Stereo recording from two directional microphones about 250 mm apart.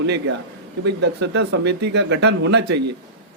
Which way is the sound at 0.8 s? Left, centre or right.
Right.